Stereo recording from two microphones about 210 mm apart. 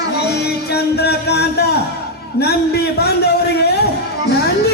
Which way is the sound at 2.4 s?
50° left (ahead or behind).